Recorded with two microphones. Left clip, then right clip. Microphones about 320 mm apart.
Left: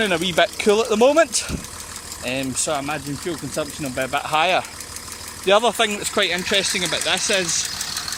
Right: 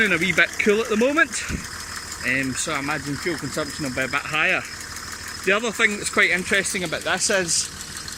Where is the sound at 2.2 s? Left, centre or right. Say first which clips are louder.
Right 3 dB; left.